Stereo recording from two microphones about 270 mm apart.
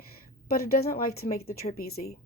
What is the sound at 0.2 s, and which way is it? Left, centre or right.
Speech, left.